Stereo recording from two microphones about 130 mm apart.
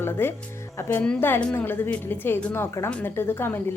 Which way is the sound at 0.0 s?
20° left (ahead or behind).